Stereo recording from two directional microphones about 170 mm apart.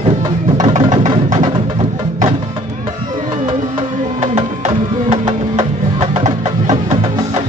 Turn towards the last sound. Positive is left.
turn(degrees=-45)  # may be behind; listen again after turning